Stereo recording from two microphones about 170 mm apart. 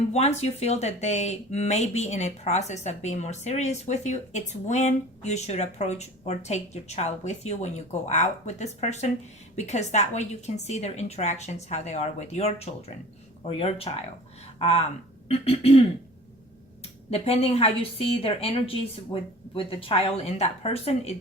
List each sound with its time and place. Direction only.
0.1 s speech: 40° left (ahead or behind)
17.1 s speech: 35° left (ahead or behind)